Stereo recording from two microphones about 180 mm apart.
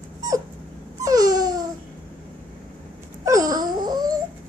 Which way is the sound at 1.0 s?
20° right (ahead or behind).